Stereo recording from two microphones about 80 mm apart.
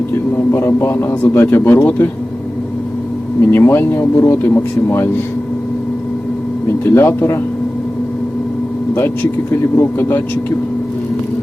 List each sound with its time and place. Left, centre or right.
0.3 s speech: left
3.4 s speech: left
6.8 s speech: left
9.0 s speech: left